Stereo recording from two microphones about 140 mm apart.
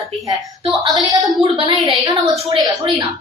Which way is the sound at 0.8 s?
35° right (ahead or behind).